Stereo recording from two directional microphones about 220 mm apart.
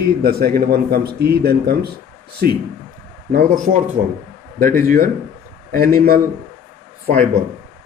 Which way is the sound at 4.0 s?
35° right (ahead or behind).